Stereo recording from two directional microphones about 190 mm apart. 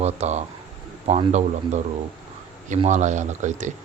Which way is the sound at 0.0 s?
35° right (ahead or behind).